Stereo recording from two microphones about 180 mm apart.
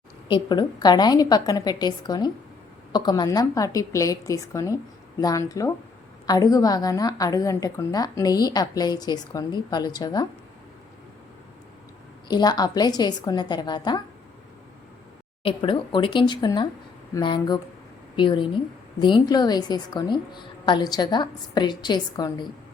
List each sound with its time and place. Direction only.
0.3 s a woman's voice: 25° left (ahead or behind)
12.3 s a woman's voice: 25° left (ahead or behind)
15.4 s a woman's voice: 30° left (ahead or behind)